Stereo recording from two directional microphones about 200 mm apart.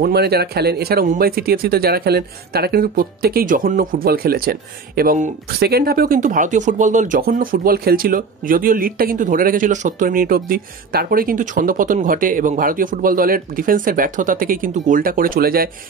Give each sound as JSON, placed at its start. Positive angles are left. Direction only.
{"t": 0.0, "sound": "speech", "side_deg": -55}